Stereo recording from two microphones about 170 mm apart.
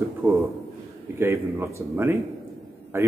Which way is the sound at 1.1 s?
15° right (ahead or behind).